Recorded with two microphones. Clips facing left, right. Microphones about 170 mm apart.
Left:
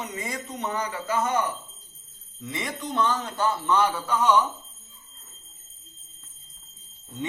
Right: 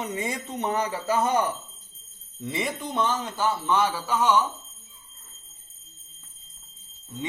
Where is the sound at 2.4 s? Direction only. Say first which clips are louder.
Right 3 dB; 25° right (ahead or behind).